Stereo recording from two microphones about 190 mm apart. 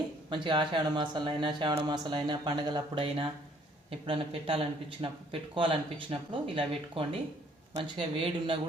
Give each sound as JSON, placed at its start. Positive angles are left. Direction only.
{"t": 0.3, "sound": "speech", "side_deg": -25}